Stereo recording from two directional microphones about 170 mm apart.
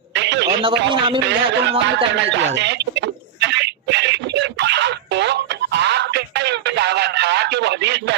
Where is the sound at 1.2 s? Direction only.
90° right.